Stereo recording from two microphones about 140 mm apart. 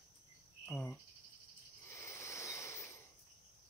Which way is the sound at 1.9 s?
20° left (ahead or behind).